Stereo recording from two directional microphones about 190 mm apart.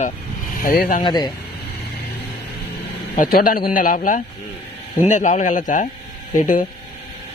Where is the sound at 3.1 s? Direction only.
45° left (ahead or behind).